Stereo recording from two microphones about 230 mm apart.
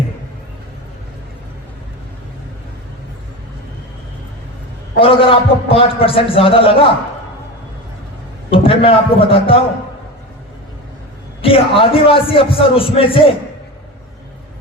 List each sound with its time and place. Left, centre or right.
4.9 s a man's voice: left
8.4 s a man's voice: left
11.4 s a man's voice: left